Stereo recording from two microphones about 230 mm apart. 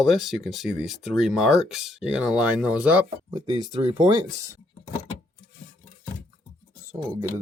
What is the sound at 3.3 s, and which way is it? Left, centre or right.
Speech, centre.